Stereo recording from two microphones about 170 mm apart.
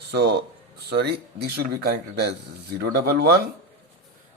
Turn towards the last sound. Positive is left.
turn(degrees=-70)  # may be behind; listen again after turning